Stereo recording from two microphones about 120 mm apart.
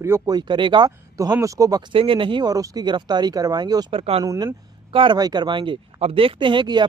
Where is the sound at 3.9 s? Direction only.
55° right (ahead or behind).